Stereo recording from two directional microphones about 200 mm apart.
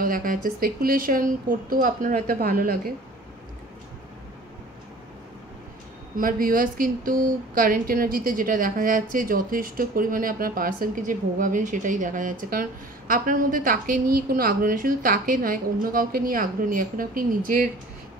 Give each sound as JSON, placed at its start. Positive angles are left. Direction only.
{"t": 0.0, "sound": "speech", "side_deg": -45}
{"t": 6.1, "sound": "speech", "side_deg": -45}